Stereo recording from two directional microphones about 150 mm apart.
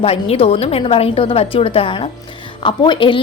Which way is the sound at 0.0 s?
40° left (ahead or behind).